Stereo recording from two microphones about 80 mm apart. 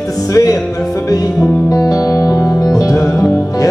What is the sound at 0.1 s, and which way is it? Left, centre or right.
Music, left.